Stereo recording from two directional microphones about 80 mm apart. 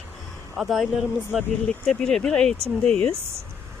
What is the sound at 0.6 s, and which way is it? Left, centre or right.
Speech, centre.